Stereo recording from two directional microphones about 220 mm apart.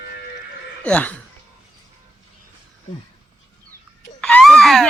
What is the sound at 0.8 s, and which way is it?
Speech, 5° left (ahead or behind).